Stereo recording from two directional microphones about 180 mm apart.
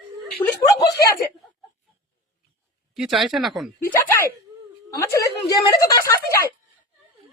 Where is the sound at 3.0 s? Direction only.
Centre (ahead or behind).